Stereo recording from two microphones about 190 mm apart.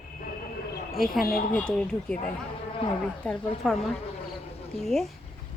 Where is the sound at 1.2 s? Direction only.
50° left (ahead or behind).